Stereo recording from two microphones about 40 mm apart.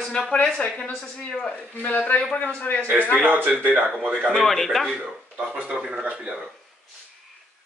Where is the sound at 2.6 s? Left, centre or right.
Left.